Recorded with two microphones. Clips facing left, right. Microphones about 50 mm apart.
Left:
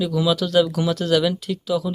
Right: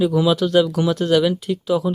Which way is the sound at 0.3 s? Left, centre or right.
Centre.